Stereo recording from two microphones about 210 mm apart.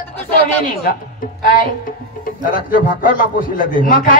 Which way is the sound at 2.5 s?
40° left (ahead or behind).